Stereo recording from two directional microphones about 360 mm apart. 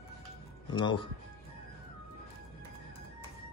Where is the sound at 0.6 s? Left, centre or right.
Centre.